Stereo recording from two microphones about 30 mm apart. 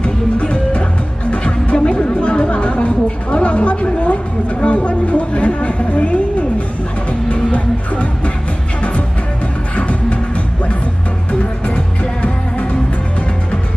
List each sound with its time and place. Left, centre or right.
0.0 s music: left
9.8 s music: left
11.6 s music: left